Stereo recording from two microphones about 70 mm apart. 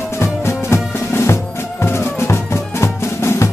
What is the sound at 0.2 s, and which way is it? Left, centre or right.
Music, left.